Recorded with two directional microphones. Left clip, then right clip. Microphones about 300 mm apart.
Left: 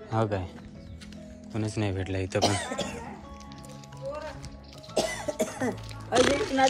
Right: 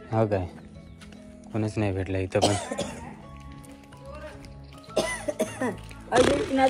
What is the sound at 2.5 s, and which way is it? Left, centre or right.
Speech, right.